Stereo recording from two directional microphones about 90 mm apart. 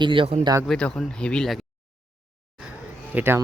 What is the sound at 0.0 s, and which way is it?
Speech, 65° right (ahead or behind).